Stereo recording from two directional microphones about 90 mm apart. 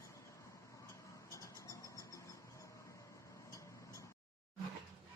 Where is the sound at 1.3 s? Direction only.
35° left (ahead or behind).